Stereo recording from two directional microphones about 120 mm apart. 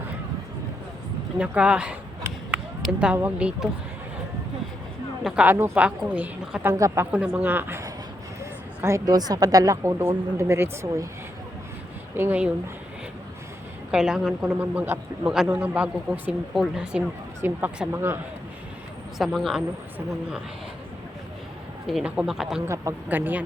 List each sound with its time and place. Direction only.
1.4 s a woman's voice: 10° right (ahead or behind)
2.5 s chop: 10° right (ahead or behind)
3.2 s a woman's voice: 10° right (ahead or behind)
5.5 s a woman's voice: 20° right (ahead or behind)
12.1 s a woman's voice: 15° right (ahead or behind)
13.9 s a woman's voice: 5° right (ahead or behind); by 18.2 s 20° right (ahead or behind)
19.2 s speech: centre (ahead or behind)
21.8 s speech: 5° right (ahead or behind)
22.6 s speech: 25° right (ahead or behind)
23.0 s a woman's voice: 15° right (ahead or behind)